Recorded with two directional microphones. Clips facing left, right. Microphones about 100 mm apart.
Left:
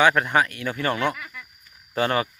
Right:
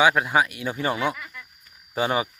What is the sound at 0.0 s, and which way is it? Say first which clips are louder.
Speech: even; 10° right (ahead or behind).